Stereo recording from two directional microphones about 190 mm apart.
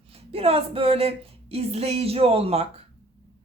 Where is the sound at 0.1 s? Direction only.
30° right (ahead or behind).